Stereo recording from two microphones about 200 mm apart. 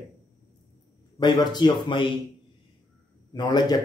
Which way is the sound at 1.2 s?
20° left (ahead or behind).